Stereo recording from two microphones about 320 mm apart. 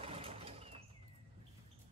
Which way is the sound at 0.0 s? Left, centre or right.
Centre.